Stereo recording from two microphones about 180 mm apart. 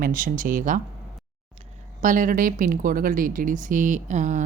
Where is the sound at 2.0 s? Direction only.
45° right (ahead or behind).